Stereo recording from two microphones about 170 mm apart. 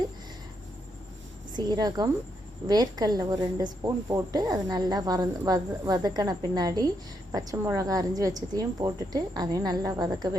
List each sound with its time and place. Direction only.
1.5 s speech: 25° right (ahead or behind)